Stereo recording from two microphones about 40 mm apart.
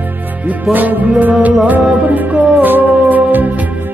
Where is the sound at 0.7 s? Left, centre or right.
Right.